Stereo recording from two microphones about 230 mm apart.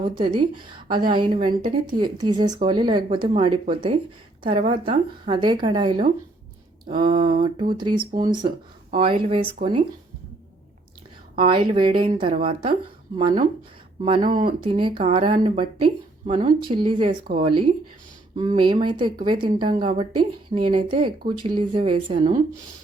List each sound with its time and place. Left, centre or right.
0.0 s speech: right
1.5 s speech: right
2.0 s speech: centre
11.3 s speech: right
14.4 s speech: right
16.7 s speech: right